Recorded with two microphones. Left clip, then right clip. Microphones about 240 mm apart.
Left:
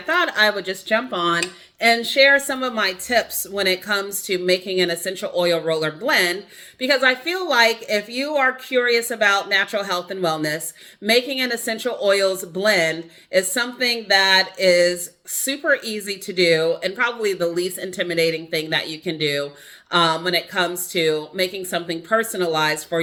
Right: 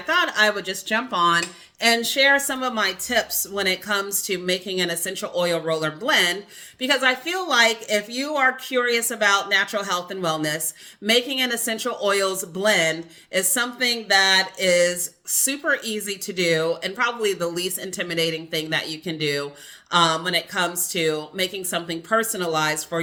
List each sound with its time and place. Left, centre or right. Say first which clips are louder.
0.1 s speech: left 1 dB; centre
2.7 s speech: left 3 dB; right
4.4 s speech: left 6 dB; centre
6.1 s speech: left 1 dB; right
6.7 s speech: left 3 dB; centre